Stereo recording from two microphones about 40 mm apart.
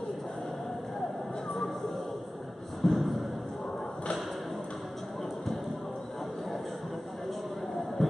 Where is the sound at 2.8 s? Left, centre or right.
Centre.